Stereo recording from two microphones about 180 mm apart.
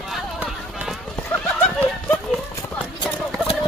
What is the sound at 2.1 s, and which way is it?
Horse, centre (ahead or behind).